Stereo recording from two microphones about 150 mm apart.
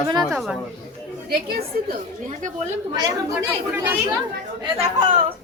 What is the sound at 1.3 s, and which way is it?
Speech, 90° right.